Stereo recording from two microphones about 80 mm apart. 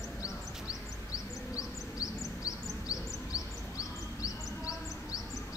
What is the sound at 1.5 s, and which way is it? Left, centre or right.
Bird, left.